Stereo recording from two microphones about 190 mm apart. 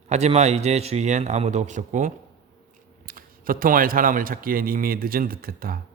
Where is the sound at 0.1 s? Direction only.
35° right (ahead or behind).